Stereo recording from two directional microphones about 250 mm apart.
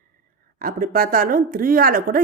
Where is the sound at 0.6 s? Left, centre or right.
Right.